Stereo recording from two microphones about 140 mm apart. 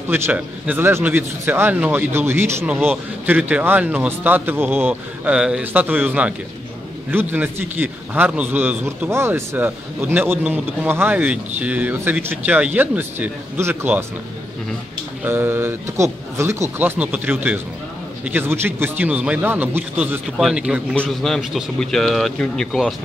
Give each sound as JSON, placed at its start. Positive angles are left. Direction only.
{"t": 0.1, "sound": "a man's voice", "side_deg": -15}
{"t": 15.2, "sound": "a man's voice", "side_deg": -15}
{"t": 20.9, "sound": "speech", "side_deg": 5}